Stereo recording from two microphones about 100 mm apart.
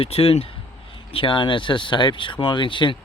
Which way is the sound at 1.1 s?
60° left (ahead or behind).